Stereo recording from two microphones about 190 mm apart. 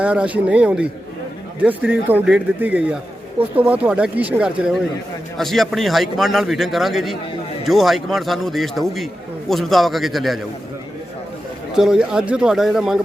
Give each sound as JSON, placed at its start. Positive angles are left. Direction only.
{"t": 0.0, "sound": "a man's voice", "side_deg": -5}
{"t": 11.7, "sound": "a man's voice", "side_deg": -5}